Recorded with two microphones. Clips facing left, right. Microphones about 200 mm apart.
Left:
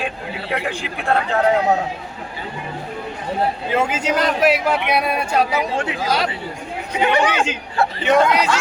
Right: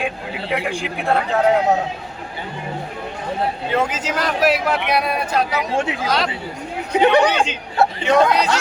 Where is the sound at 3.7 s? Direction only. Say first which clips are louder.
Left 3 dB; centre (ahead or behind).